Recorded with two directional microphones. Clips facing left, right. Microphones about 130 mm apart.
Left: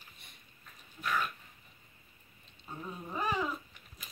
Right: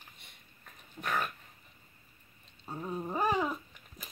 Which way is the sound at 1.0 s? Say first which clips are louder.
Even; 55° right (ahead or behind).